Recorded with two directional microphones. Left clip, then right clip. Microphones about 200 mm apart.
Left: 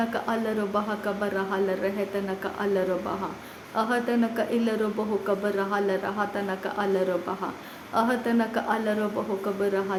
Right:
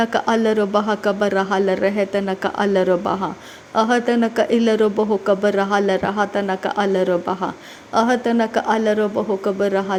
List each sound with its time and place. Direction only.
0.0 s speech: 40° right (ahead or behind)